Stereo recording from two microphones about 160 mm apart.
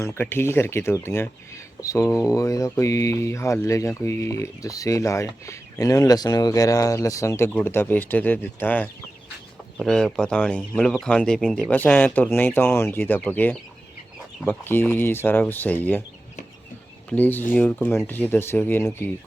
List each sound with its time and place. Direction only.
0.0 s speech: 15° left (ahead or behind)
1.8 s mantra: 20° left (ahead or behind)
7.6 s speech: 15° left (ahead or behind)
17.1 s speech: 10° left (ahead or behind)